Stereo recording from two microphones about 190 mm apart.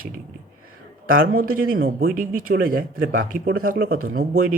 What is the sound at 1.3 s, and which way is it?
Speech, 50° right (ahead or behind).